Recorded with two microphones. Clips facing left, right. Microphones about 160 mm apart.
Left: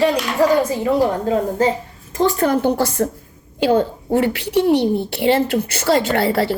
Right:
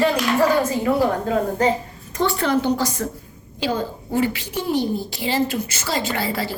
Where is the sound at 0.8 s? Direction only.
25° left (ahead or behind).